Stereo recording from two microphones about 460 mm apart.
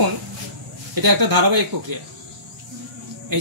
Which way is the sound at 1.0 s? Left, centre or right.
Right.